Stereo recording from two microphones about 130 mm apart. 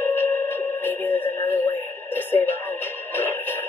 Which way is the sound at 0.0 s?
15° left (ahead or behind).